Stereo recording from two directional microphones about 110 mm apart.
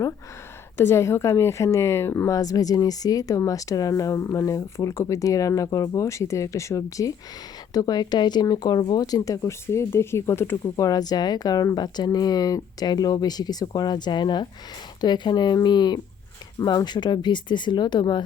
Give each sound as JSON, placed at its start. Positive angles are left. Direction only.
{"t": 0.8, "sound": "a woman's voice", "side_deg": 25}
{"t": 10.8, "sound": "a woman's voice", "side_deg": 35}